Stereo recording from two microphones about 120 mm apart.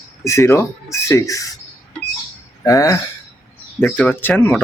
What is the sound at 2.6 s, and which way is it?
Speech, 30° left (ahead or behind).